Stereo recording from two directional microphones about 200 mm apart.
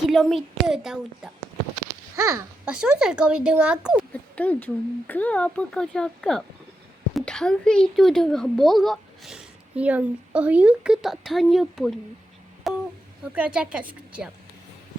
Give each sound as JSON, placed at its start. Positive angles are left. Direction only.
{"t": 0.1, "sound": "speech", "side_deg": 0}
{"t": 2.1, "sound": "a child's voice", "side_deg": -15}
{"t": 2.6, "sound": "speech", "side_deg": -5}
{"t": 4.1, "sound": "speech", "side_deg": 5}
{"t": 12.7, "sound": "a sound", "side_deg": 0}
{"t": 13.3, "sound": "speech", "side_deg": -5}